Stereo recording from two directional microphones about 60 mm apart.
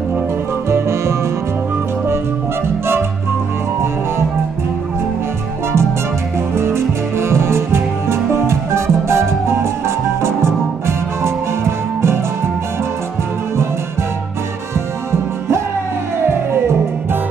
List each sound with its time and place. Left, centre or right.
0.7 s music: right
6.5 s music: right